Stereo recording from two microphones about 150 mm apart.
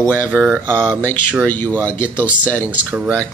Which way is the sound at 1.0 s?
10° left (ahead or behind).